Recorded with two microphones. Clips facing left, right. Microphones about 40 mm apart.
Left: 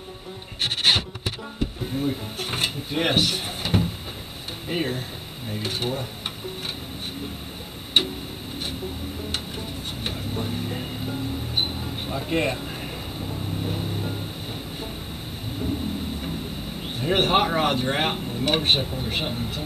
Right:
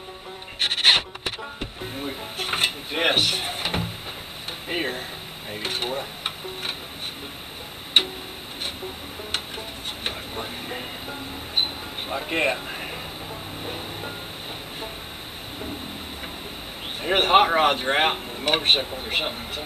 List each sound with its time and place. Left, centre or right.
0.6 s music: centre
4.6 s speech: centre
5.5 s stir: right
8.0 s music: centre
10.0 s music: right
17.0 s speech: right